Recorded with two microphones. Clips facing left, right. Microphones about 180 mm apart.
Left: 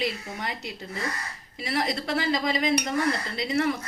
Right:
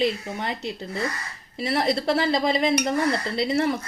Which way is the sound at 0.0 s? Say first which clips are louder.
Right 6 dB; 30° right (ahead or behind).